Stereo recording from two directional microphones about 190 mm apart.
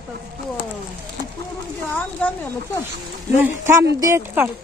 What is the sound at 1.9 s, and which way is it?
Speech, 10° left (ahead or behind).